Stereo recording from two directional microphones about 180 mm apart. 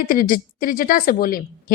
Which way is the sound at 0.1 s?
50° left (ahead or behind).